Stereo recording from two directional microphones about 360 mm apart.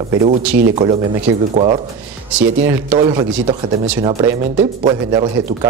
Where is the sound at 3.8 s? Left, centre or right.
Centre.